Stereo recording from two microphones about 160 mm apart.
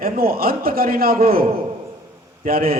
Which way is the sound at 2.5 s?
65° right (ahead or behind).